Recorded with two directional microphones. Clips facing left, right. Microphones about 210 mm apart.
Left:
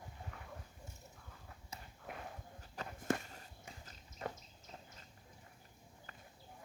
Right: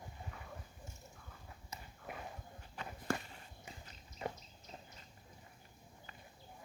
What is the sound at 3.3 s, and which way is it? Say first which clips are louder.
Biting: even; 40° left (ahead or behind).